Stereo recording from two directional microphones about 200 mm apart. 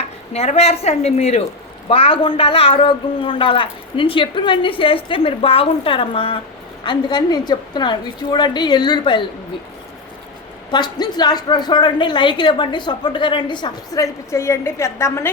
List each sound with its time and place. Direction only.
0.0 s stir: 30° left (ahead or behind)
1.9 s speech: 25° left (ahead or behind)
10.7 s speech: 20° left (ahead or behind)